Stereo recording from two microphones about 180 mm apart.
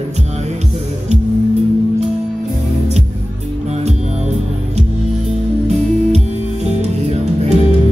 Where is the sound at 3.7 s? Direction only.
40° right (ahead or behind).